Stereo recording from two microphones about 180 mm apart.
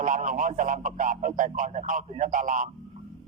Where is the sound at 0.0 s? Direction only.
45° right (ahead or behind).